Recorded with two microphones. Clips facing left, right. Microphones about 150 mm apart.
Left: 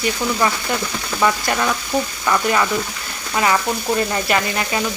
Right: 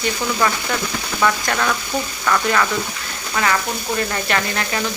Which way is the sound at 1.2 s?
15° left (ahead or behind).